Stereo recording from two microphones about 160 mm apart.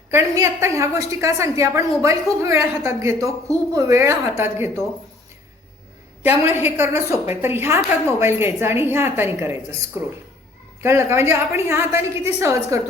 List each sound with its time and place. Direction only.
0.1 s a woman's voice: 15° right (ahead or behind)
6.2 s a woman's voice: 15° right (ahead or behind)